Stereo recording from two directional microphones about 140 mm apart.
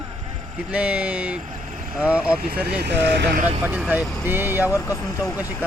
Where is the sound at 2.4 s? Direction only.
90° right.